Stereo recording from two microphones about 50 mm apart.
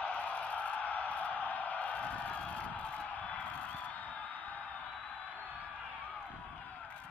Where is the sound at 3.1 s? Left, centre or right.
Left.